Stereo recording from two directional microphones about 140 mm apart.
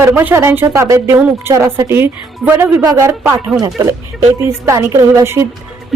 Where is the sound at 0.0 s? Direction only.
15° right (ahead or behind).